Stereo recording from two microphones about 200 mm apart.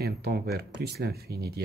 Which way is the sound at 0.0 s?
50° right (ahead or behind).